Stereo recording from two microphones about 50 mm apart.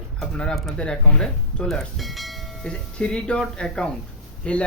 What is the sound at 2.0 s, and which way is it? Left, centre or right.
Train, centre.